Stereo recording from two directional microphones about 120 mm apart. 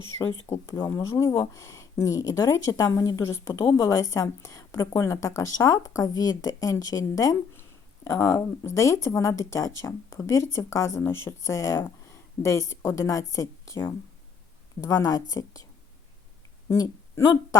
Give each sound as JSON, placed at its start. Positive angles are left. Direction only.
{"t": 0.4, "sound": "a woman's voice", "side_deg": 20}
{"t": 16.6, "sound": "speech", "side_deg": 25}